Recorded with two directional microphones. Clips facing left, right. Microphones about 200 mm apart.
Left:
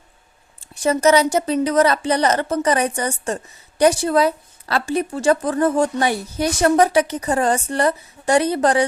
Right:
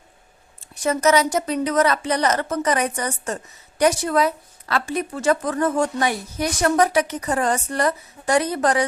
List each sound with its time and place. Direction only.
0.6 s a woman's voice: 30° left (ahead or behind)